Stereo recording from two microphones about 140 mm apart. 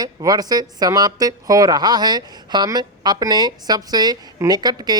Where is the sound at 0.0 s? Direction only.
25° right (ahead or behind).